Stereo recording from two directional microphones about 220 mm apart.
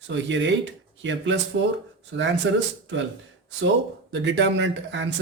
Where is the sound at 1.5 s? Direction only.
55° right (ahead or behind).